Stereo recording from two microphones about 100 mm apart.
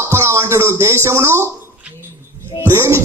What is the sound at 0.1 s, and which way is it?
Speech, 25° right (ahead or behind).